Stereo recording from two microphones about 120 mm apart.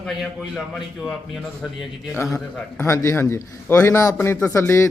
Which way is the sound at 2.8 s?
25° left (ahead or behind).